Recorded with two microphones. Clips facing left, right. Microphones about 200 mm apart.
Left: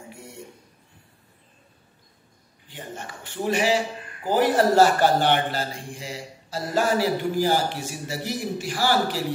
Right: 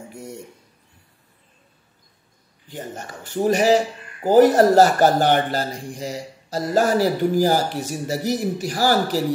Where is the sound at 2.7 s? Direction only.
40° right (ahead or behind).